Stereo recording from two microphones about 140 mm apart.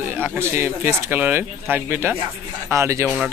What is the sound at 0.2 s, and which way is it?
Speech, 20° right (ahead or behind).